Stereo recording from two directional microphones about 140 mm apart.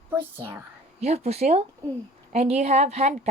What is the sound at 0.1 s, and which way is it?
Speech, 15° right (ahead or behind).